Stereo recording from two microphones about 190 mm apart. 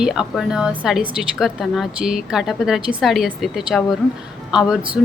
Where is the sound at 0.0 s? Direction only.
5° right (ahead or behind).